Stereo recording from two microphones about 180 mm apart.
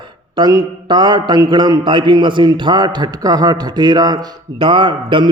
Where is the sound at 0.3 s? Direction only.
25° right (ahead or behind).